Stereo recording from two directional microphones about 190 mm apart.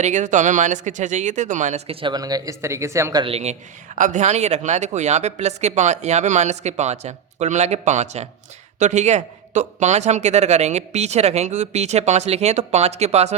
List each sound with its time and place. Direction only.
0.0 s speech: 40° right (ahead or behind); by 3.3 s 20° right (ahead or behind)
3.3 s speech: 35° right (ahead or behind)